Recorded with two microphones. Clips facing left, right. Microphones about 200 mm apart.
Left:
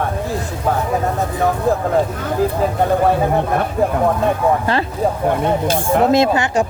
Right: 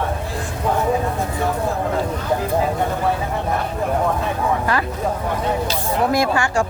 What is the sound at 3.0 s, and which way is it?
Speech, 55° left (ahead or behind).